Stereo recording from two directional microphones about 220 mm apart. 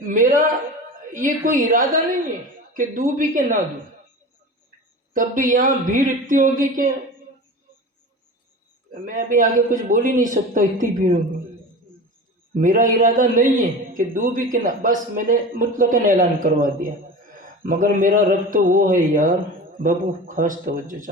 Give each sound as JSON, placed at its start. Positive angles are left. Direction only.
{"t": 0.0, "sound": "a man's voice", "side_deg": -40}
{"t": 1.5, "sound": "a man's voice", "side_deg": -35}
{"t": 5.1, "sound": "a man's voice", "side_deg": -35}
{"t": 8.9, "sound": "a man's voice", "side_deg": -40}
{"t": 12.5, "sound": "a man's voice", "side_deg": -35}